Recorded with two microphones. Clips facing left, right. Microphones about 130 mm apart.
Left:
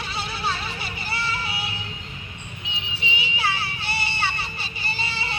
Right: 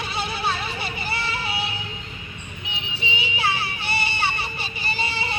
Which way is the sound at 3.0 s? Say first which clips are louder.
Right 1 dB; 20° right (ahead or behind).